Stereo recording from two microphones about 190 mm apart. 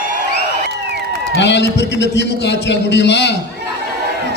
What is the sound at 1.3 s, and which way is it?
A man's voice, 65° left (ahead or behind).